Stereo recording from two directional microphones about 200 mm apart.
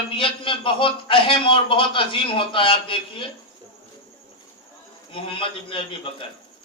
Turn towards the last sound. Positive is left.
turn(degrees=25)  # may be behind; listen again after turning